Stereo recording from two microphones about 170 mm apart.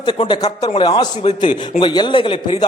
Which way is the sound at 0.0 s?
25° left (ahead or behind).